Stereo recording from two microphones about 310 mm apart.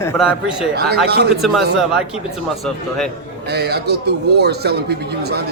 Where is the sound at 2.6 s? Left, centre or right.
Centre.